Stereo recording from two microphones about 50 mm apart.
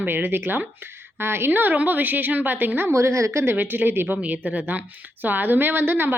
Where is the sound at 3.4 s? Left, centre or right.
Right.